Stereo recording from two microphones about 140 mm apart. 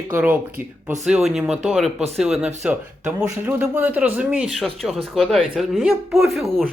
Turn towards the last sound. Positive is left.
turn(degrees=0)  # may be behind; listen again after turning